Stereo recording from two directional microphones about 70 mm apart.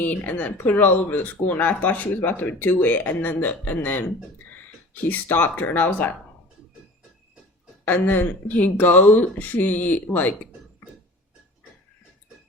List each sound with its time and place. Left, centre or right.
0.0 s speech: left
5.0 s speech: left
7.9 s speech: left